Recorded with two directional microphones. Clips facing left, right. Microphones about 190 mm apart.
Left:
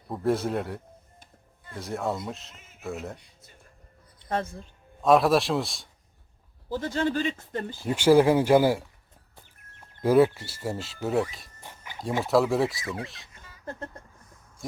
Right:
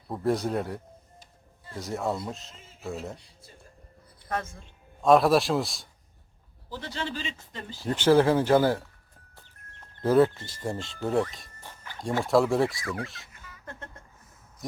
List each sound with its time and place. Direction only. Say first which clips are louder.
0.1 s a man's voice: left 1 dB; centre (ahead or behind)
4.3 s speech: left 3 dB; 30° left (ahead or behind)
4.9 s a man's voice: even; centre (ahead or behind)
6.7 s speech: left 8 dB; 45° left (ahead or behind)
7.9 s speech: left 2 dB; 10° left (ahead or behind)
9.9 s speech: left 1 dB; 10° left (ahead or behind)
11.6 s a sound: left 1 dB; 15° left (ahead or behind)
12.2 s a man's voice: even; centre (ahead or behind)
12.8 s speech: right 1 dB; 20° left (ahead or behind)
13.2 s a sound: left 5 dB; 30° left (ahead or behind)